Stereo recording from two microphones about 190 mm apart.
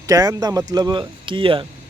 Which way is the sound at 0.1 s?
20° right (ahead or behind).